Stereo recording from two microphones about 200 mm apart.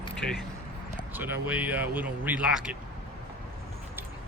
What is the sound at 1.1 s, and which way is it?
Speech, 10° right (ahead or behind).